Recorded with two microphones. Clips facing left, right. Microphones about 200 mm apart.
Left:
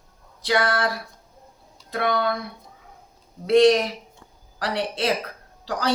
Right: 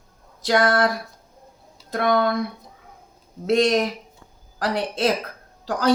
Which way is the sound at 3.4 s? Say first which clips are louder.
Left 3 dB; 45° right (ahead or behind).